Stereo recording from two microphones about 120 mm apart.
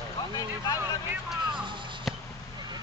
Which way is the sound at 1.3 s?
5° right (ahead or behind).